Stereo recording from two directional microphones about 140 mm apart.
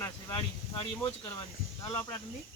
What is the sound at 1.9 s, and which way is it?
Speech, 20° left (ahead or behind).